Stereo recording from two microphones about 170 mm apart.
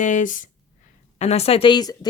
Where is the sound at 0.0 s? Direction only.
50° left (ahead or behind).